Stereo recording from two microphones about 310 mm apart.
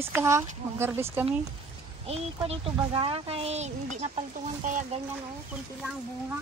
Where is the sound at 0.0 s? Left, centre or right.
Centre.